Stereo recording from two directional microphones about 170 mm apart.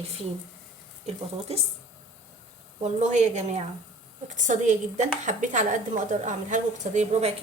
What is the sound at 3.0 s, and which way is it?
A woman's voice, 45° right (ahead or behind).